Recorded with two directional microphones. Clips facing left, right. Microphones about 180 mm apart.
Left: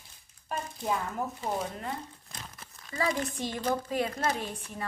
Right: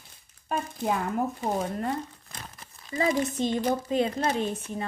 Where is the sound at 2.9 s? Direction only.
20° right (ahead or behind).